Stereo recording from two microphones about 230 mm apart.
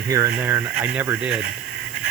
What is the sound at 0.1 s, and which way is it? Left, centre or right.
Speech, centre.